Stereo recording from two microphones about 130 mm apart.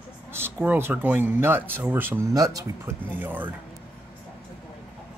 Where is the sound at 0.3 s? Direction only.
15° right (ahead or behind).